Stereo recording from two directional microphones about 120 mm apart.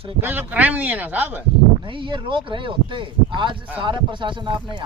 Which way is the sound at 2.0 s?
45° right (ahead or behind).